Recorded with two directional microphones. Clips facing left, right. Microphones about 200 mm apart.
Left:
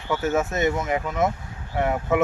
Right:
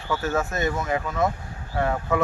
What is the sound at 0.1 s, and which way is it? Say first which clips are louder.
Speech: left 2 dB; 20° left (ahead or behind).